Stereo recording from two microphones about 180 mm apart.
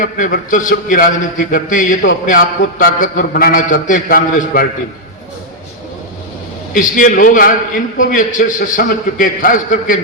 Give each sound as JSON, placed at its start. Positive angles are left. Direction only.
{"t": 0.0, "sound": "a man's voice", "side_deg": 50}
{"t": 6.7, "sound": "a man's voice", "side_deg": 45}